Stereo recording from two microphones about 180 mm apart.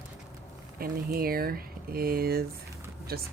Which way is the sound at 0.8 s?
55° right (ahead or behind).